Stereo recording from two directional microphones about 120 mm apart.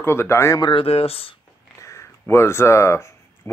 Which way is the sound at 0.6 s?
50° left (ahead or behind).